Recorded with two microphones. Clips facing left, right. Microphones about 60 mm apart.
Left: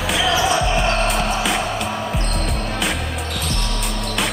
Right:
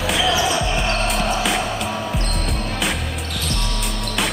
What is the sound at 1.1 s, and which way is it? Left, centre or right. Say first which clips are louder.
Music: even; centre.